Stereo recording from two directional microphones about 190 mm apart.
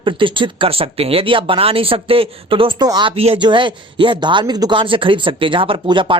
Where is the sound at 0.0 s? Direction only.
25° right (ahead or behind).